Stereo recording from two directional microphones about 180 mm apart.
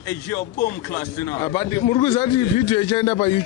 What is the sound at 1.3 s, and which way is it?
A man's voice, 20° left (ahead or behind).